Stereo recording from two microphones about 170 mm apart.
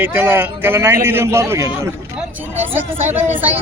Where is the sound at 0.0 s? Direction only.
10° right (ahead or behind).